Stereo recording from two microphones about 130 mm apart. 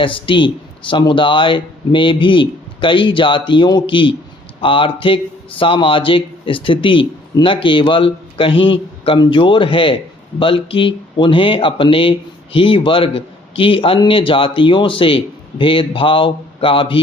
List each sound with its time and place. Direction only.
0.0 s a man's voice: 40° left (ahead or behind)